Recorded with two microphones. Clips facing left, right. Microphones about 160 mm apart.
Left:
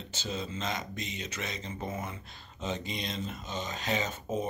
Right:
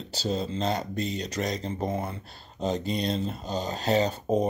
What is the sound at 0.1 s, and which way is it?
Speech, 35° right (ahead or behind).